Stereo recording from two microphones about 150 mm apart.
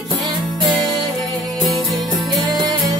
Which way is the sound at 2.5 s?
25° right (ahead or behind).